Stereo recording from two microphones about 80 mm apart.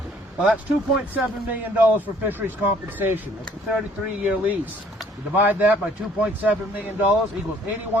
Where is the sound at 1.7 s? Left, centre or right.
Right.